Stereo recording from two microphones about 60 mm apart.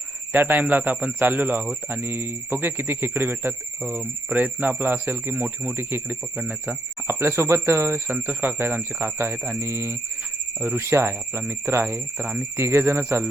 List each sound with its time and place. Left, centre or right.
0.3 s speech: right
4.3 s speech: right
8.0 s speech: right
10.6 s speech: right
10.8 s speech: right